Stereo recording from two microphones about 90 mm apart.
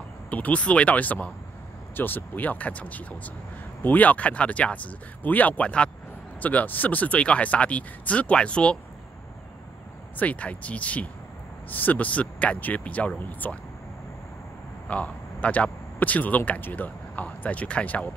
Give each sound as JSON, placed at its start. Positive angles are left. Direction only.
{"t": 0.3, "sound": "speech", "side_deg": 15}
{"t": 10.1, "sound": "speech", "side_deg": 15}
{"t": 14.9, "sound": "a man's voice", "side_deg": 15}